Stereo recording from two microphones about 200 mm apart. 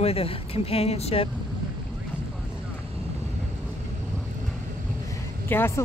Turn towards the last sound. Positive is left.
turn(degrees=10)  # may be behind; listen again after turning